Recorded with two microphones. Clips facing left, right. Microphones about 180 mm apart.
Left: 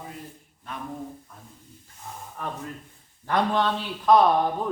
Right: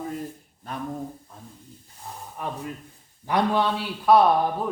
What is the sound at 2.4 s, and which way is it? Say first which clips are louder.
Speech: right 2 dB; 15° right (ahead or behind).